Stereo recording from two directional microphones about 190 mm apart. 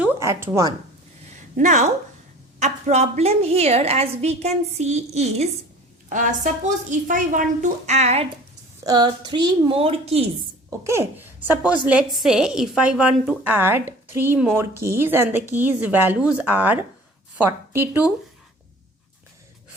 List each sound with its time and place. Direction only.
0.0 s a sound: 15° right (ahead or behind)
1.5 s a woman's voice: 40° right (ahead or behind)
8.8 s a woman's voice: 20° right (ahead or behind)
10.7 s a woman's voice: 15° right (ahead or behind)